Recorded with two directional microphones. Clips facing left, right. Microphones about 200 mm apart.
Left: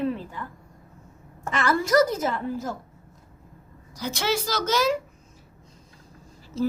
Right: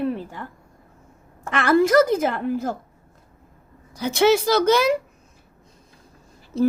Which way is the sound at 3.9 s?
55° right (ahead or behind).